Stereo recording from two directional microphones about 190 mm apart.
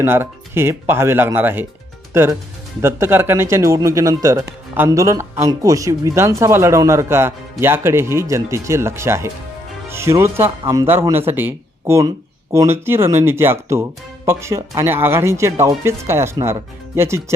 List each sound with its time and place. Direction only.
0.0 s speech: 10° right (ahead or behind)
2.8 s speech: 10° right (ahead or behind)